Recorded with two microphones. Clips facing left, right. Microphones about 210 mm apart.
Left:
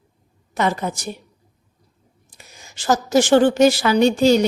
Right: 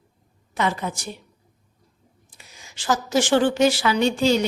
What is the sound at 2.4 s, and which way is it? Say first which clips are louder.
A woman's voice: left 3 dB; 40° left (ahead or behind).